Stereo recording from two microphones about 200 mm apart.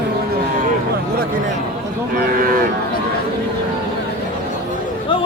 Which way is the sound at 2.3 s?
45° right (ahead or behind).